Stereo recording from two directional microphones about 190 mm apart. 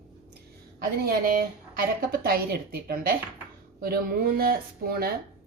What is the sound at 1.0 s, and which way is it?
Speech, 50° right (ahead or behind).